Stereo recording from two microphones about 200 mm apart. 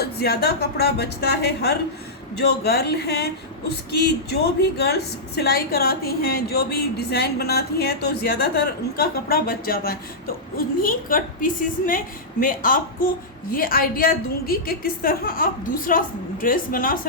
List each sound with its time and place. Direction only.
0.0 s a woman's voice: 50° left (ahead or behind)